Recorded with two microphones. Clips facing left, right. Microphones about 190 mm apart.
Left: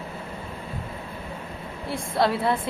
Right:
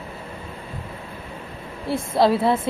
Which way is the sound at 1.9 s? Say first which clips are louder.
Right 5 dB; 25° right (ahead or behind).